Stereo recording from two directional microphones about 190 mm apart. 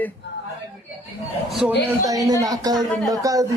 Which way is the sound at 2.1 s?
20° right (ahead or behind).